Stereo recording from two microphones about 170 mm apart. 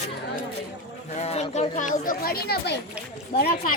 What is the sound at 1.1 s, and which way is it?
Speech, 40° left (ahead or behind).